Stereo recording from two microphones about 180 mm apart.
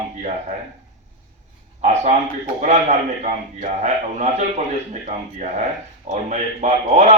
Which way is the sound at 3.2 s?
40° right (ahead or behind).